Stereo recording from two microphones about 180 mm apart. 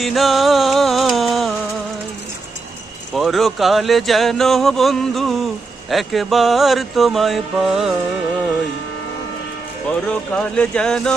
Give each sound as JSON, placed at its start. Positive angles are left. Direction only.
{"t": 0.0, "sound": "music", "side_deg": 0}
{"t": 3.2, "sound": "speech", "side_deg": 0}
{"t": 10.1, "sound": "speech", "side_deg": 5}